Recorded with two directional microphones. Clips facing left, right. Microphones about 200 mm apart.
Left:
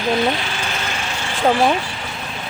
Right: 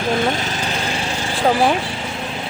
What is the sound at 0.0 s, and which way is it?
Vehicle, 50° right (ahead or behind).